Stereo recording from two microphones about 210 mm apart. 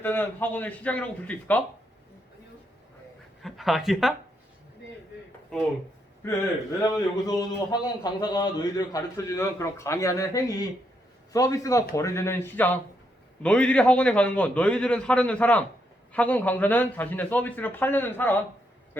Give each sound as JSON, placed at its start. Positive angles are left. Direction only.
{"t": 0.0, "sound": "a man's voice", "side_deg": 10}
{"t": 3.4, "sound": "a man's voice", "side_deg": 0}
{"t": 5.5, "sound": "a man's voice", "side_deg": 0}
{"t": 6.9, "sound": "a man's voice", "side_deg": 20}